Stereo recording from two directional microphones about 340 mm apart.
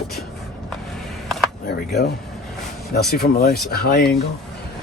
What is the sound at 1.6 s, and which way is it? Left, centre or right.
Speech, left.